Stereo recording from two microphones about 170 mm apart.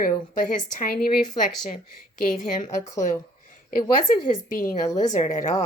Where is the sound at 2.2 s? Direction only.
50° left (ahead or behind).